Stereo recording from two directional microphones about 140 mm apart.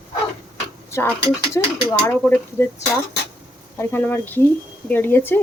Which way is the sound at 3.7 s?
15° left (ahead or behind).